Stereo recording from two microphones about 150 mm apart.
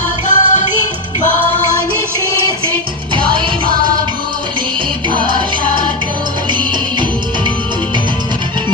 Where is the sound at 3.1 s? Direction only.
35° right (ahead or behind).